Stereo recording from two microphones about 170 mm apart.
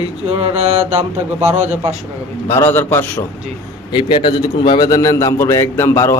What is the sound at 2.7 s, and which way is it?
Speech, 10° left (ahead or behind).